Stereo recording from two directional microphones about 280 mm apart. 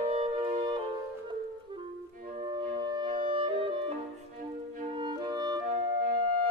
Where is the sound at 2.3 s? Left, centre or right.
Centre.